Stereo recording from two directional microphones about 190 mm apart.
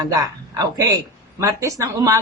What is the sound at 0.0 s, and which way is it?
A man's voice, 20° right (ahead or behind).